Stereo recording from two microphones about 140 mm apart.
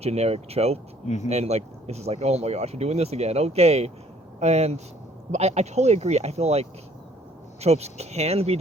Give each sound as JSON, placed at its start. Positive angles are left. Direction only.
{"t": 0.0, "sound": "speech", "side_deg": -45}
{"t": 1.0, "sound": "speech", "side_deg": 55}
{"t": 1.3, "sound": "speech", "side_deg": -50}